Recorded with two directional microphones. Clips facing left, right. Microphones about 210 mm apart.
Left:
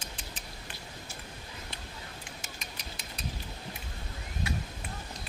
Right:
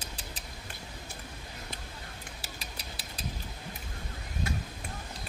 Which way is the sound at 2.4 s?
35° right (ahead or behind).